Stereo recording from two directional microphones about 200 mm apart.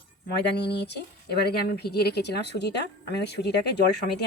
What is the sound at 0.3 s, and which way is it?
Speech, 55° left (ahead or behind).